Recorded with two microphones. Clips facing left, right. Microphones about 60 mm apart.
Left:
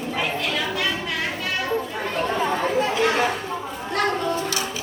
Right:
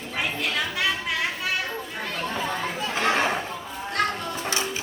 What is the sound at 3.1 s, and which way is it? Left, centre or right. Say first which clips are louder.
Chatter: left 1 dB; right.